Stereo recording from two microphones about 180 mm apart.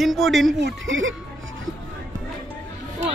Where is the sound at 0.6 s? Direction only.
90° right.